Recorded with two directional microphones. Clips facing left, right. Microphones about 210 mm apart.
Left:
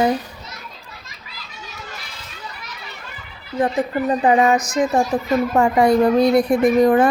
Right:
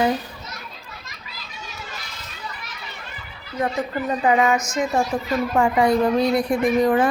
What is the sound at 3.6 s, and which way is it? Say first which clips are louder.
A woman's voice: left 4 dB; 30° left (ahead or behind).